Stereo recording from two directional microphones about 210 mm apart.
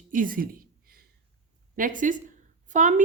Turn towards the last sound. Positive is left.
turn(degrees=-40)  # may be behind; listen again after turning